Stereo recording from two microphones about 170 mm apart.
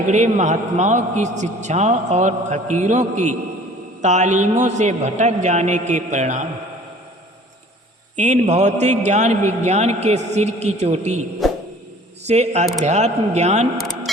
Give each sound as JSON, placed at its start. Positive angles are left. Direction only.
{"t": 0.1, "sound": "a man's voice", "side_deg": -45}
{"t": 8.1, "sound": "a man's voice", "side_deg": -45}
{"t": 11.4, "sound": "insect", "side_deg": 0}
{"t": 12.3, "sound": "a man's voice", "side_deg": -40}